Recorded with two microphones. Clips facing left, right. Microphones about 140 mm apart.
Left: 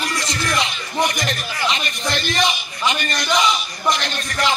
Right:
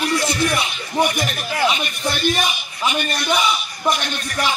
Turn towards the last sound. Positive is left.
turn(degrees=-10)  # may be behind; listen again after turning